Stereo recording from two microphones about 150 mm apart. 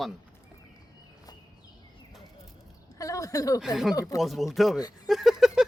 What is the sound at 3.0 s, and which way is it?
Speech, 20° left (ahead or behind).